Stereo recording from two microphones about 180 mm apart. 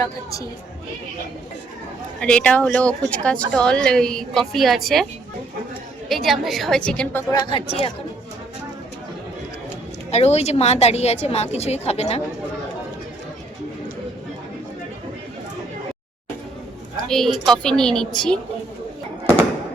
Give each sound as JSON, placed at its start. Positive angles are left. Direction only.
{"t": 0.0, "sound": "speech", "side_deg": 20}
{"t": 2.2, "sound": "speech", "side_deg": 5}
{"t": 6.1, "sound": "speech", "side_deg": 0}
{"t": 7.5, "sound": "a woman's voice", "side_deg": 30}
{"t": 10.1, "sound": "a woman's voice", "side_deg": 35}
{"t": 17.1, "sound": "speech", "side_deg": 0}